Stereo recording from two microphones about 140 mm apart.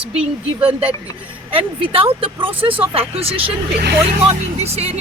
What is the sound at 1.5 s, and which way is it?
Speech, 40° right (ahead or behind).